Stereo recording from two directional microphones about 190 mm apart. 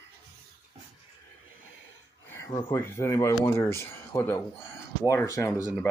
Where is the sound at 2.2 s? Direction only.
15° left (ahead or behind).